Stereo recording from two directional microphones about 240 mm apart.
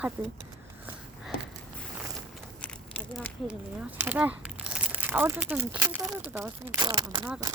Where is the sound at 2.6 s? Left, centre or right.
Centre.